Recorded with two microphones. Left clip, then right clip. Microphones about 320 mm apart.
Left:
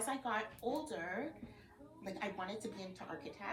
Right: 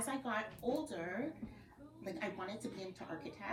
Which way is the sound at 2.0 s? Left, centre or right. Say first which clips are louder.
Even; centre.